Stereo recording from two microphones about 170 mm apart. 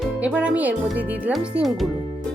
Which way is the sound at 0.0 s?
10° right (ahead or behind).